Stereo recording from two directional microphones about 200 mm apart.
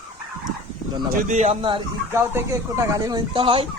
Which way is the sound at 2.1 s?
15° right (ahead or behind).